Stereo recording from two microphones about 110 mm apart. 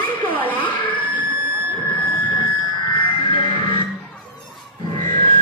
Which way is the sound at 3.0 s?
50° left (ahead or behind).